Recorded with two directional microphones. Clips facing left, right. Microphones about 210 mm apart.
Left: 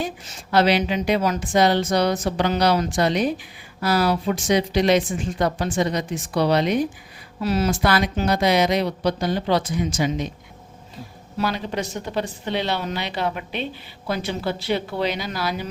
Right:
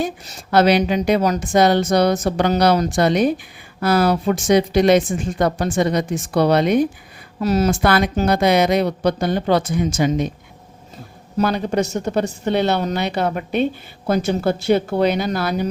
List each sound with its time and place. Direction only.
0.0 s a woman's voice: 45° right (ahead or behind)
7.4 s a woman's voice: 40° right (ahead or behind)
11.3 s a woman's voice: 45° right (ahead or behind)